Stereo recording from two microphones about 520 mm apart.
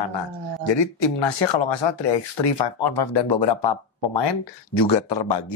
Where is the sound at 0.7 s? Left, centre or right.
Left.